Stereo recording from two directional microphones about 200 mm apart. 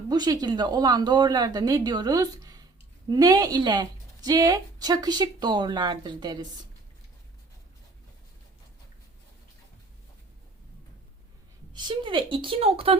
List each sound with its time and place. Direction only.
0.1 s a woman's voice: 20° right (ahead or behind)
11.7 s a woman's voice: 25° right (ahead or behind)